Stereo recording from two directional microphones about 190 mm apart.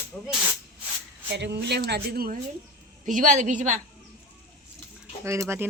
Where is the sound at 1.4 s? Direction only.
65° right (ahead or behind); by 3.7 s 40° right (ahead or behind).